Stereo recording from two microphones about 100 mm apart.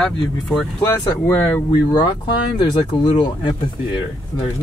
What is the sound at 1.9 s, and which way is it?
Speech, 45° left (ahead or behind).